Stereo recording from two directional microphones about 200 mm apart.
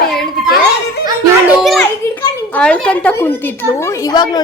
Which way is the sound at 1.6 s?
Centre (ahead or behind).